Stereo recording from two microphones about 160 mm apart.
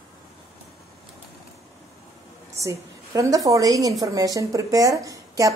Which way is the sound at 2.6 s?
20° right (ahead or behind).